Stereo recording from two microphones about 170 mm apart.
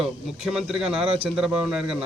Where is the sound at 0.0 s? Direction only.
Centre (ahead or behind).